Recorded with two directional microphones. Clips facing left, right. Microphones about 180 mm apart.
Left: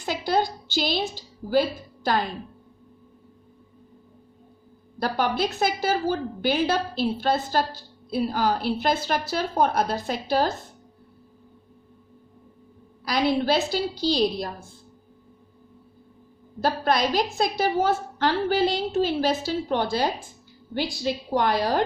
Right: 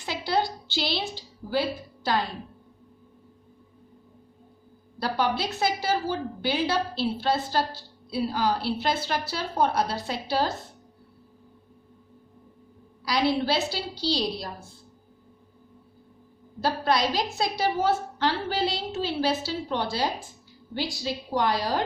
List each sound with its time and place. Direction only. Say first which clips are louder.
0.0 s a woman's voice: left 3 dB; 45° left (ahead or behind)
4.9 s a woman's voice: left 2 dB; 50° left (ahead or behind)
13.1 s a woman's voice: left 2 dB; 50° left (ahead or behind)
16.6 s a woman's voice: left 2 dB; 50° left (ahead or behind)